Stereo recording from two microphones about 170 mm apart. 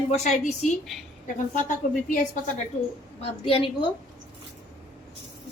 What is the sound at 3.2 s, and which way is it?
Speech, 35° left (ahead or behind).